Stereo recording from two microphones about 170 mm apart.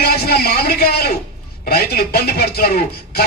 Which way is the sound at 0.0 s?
65° left (ahead or behind).